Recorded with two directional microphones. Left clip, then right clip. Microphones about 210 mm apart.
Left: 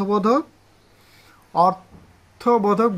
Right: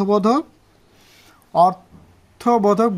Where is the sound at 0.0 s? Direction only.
50° right (ahead or behind).